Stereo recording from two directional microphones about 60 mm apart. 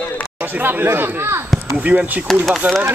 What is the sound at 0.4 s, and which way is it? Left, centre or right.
Speech, right.